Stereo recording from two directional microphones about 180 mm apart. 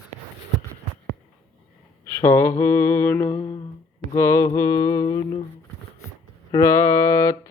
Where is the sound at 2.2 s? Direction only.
10° left (ahead or behind).